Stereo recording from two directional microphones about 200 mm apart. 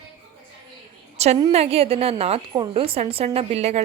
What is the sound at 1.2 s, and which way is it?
A woman's voice, 35° right (ahead or behind).